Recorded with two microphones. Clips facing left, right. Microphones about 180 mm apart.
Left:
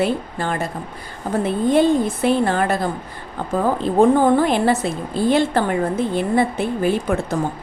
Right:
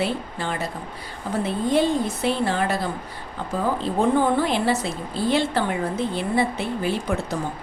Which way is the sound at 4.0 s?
50° left (ahead or behind).